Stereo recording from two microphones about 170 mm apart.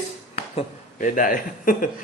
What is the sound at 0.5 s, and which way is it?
Speech, 50° left (ahead or behind).